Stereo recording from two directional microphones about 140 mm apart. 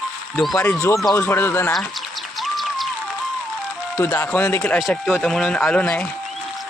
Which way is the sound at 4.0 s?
20° left (ahead or behind).